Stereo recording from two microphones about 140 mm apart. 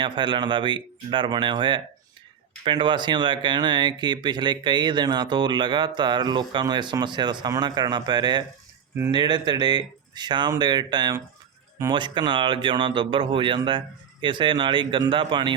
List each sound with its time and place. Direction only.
0.0 s speech: 35° right (ahead or behind)